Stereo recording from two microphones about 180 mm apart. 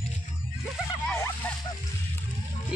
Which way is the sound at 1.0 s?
15° left (ahead or behind).